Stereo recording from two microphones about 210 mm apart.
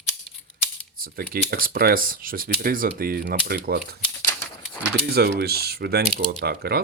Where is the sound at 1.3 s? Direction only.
45° right (ahead or behind).